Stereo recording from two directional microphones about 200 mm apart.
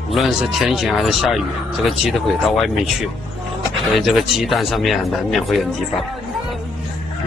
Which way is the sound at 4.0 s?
Centre (ahead or behind).